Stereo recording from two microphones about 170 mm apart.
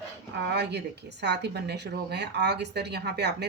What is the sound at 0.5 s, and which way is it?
A woman's voice, 80° right.